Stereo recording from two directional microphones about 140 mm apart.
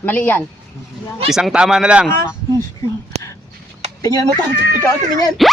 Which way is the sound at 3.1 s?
50° right (ahead or behind).